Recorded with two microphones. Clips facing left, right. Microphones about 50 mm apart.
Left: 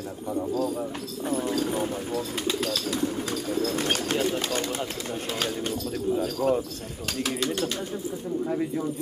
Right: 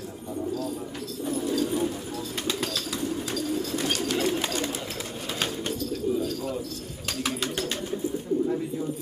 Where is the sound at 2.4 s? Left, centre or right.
Centre.